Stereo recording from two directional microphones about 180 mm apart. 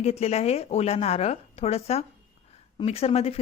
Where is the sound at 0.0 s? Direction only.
35° left (ahead or behind).